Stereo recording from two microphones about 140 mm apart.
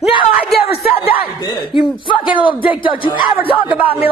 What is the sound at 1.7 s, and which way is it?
Speech, 35° left (ahead or behind).